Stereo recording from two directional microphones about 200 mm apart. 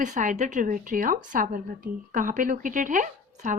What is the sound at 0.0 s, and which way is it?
Speech, 40° right (ahead or behind).